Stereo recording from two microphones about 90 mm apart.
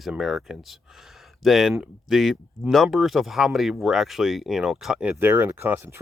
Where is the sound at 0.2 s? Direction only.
Centre (ahead or behind).